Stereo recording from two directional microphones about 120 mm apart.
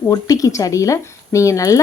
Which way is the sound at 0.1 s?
30° left (ahead or behind).